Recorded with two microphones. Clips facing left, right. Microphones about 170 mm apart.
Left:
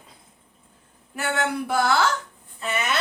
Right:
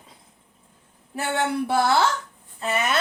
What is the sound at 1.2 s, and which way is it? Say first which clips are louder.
Speech: right 1 dB; 30° right (ahead or behind).